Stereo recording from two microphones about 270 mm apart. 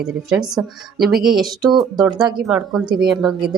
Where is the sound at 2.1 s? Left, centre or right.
Centre.